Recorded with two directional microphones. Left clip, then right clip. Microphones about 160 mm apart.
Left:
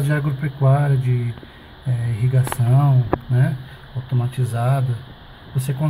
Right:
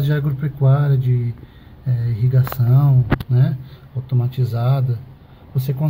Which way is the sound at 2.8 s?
5° right (ahead or behind).